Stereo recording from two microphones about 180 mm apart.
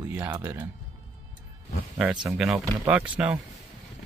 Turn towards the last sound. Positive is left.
turn(degrees=-5)  # may be behind; listen again after turning